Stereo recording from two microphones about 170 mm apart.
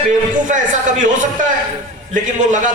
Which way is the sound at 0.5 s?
50° right (ahead or behind).